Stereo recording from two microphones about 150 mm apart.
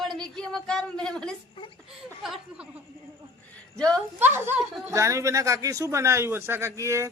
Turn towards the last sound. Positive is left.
turn(degrees=-20)  # may be behind; listen again after turning